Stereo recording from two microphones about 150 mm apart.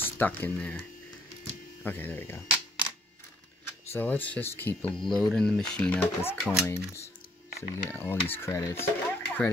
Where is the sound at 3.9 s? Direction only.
10° left (ahead or behind).